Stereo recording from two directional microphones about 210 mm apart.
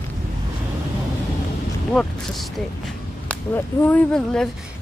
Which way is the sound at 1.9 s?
Centre (ahead or behind).